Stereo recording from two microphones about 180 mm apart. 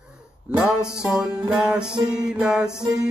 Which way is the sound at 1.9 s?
25° right (ahead or behind).